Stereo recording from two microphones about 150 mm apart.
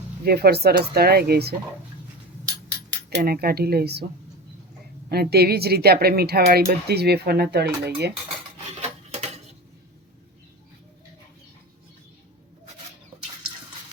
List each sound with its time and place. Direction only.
0.3 s speech: 90° right
3.1 s speech: 90° right
5.0 s speech: 90° right
8.8 s dishes: 45° right (ahead or behind)